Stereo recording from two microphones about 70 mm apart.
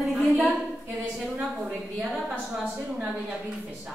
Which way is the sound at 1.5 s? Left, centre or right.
Centre.